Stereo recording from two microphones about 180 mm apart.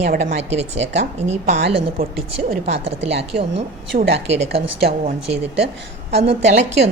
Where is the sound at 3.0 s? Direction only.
75° right (ahead or behind).